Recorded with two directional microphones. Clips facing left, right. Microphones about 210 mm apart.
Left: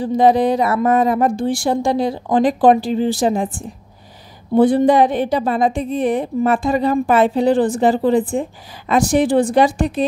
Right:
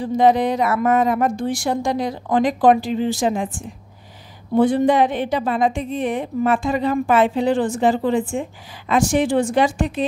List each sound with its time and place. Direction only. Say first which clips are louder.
0.0 s a woman's voice: left 2 dB; 35° left (ahead or behind)